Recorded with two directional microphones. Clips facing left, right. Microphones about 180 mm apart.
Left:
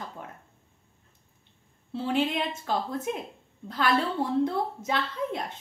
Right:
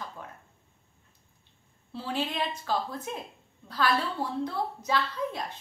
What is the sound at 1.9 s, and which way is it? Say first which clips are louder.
A woman's voice: left 5 dB; 20° left (ahead or behind).